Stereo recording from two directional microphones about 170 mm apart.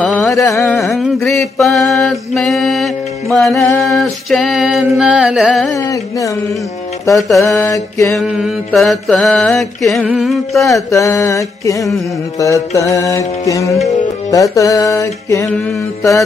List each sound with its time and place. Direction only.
0.0 s carnatic music: 5° left (ahead or behind)
0.5 s music: centre (ahead or behind)
5.8 s music: 20° left (ahead or behind)
7.2 s music: centre (ahead or behind)
7.4 s mantra: 15° left (ahead or behind)
8.1 s music: centre (ahead or behind)
10.9 s music: 20° left (ahead or behind)